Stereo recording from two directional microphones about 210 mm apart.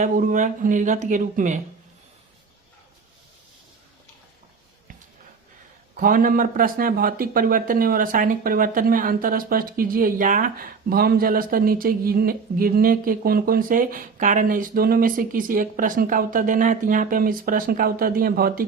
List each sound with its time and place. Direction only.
0.0 s speech: 40° right (ahead or behind)
6.0 s speech: 40° right (ahead or behind)